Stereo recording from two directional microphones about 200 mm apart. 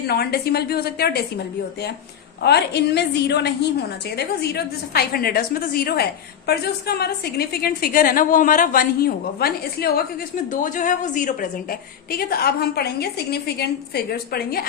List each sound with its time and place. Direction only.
0.1 s a woman's voice: 50° left (ahead or behind)
2.4 s a woman's voice: 55° left (ahead or behind)